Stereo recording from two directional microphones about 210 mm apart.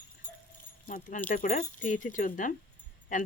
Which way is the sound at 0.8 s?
40° left (ahead or behind).